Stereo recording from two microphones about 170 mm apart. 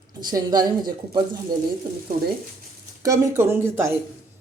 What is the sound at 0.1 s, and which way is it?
Speech, 25° right (ahead or behind).